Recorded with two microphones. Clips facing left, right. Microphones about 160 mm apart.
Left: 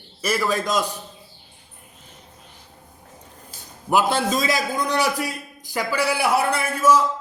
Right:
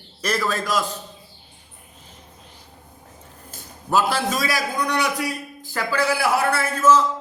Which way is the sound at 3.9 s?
20° left (ahead or behind).